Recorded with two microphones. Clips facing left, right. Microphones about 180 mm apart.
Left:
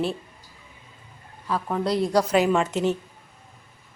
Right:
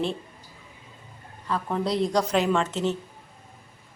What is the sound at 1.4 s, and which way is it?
A woman's voice, 5° left (ahead or behind).